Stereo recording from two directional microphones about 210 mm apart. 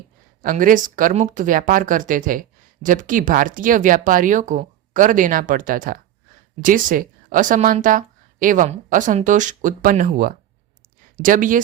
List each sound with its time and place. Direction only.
0.4 s speech: 40° right (ahead or behind)